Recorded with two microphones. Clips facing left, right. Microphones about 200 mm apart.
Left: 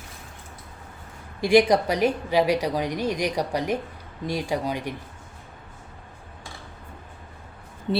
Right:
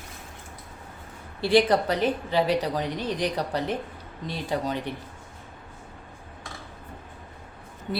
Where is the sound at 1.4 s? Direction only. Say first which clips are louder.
Left 2 dB; 15° left (ahead or behind).